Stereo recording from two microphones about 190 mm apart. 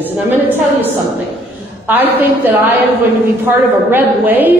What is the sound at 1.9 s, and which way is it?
Speech, 10° right (ahead or behind).